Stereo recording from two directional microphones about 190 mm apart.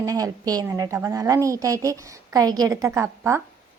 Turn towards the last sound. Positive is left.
turn(degrees=-15)  # may be behind; listen again after turning